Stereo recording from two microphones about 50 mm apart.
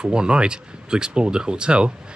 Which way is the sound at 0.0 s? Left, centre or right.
Centre.